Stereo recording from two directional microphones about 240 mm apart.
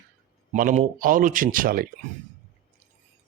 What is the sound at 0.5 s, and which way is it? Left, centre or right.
A man's voice, right.